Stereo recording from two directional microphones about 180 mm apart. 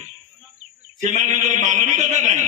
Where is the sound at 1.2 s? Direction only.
40° right (ahead or behind).